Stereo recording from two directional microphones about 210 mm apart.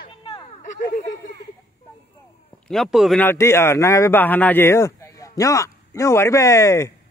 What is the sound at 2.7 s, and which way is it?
A man's voice, centre (ahead or behind).